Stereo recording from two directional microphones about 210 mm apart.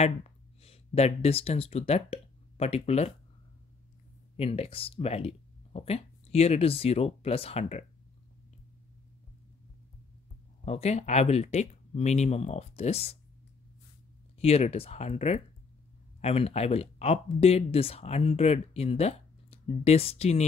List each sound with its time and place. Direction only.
0.6 s speech: 30° left (ahead or behind)
4.4 s speech: 25° left (ahead or behind)
10.6 s speech: 30° left (ahead or behind)
14.4 s speech: 30° left (ahead or behind)